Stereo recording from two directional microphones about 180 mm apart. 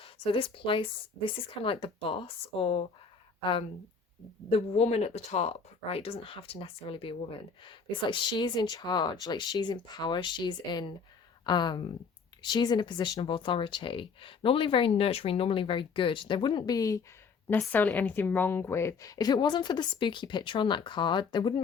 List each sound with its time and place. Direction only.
0.0 s a woman's voice: 30° left (ahead or behind)